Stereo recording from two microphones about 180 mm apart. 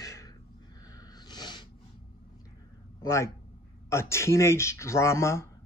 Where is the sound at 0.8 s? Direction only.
20° left (ahead or behind).